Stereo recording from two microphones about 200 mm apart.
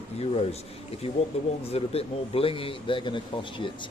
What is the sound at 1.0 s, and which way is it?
Speech, 30° left (ahead or behind).